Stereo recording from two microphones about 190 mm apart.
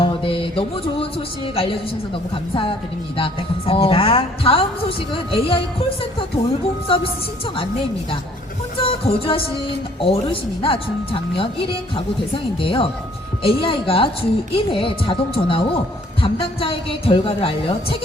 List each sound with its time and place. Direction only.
0.0 s mantra: 30° left (ahead or behind)
2.3 s speech: 25° left (ahead or behind)
8.8 s speech: 30° left (ahead or behind)